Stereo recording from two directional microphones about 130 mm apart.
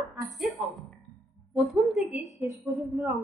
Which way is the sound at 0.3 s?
Centre (ahead or behind).